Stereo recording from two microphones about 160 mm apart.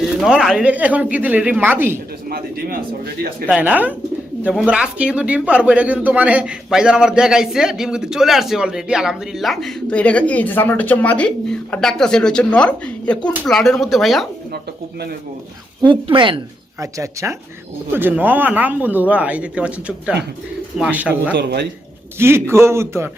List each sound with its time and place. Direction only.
0.2 s speech: 5° right (ahead or behind)
2.3 s speech: 70° right (ahead or behind)
3.5 s a man's voice: 10° right (ahead or behind)
15.8 s speech: 30° right (ahead or behind)
16.8 s speech: 20° right (ahead or behind)
21.3 s a man's voice: 90° right
22.2 s speech: 15° right (ahead or behind)